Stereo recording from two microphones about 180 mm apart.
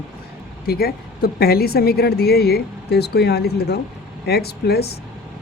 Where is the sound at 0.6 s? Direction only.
60° left (ahead or behind).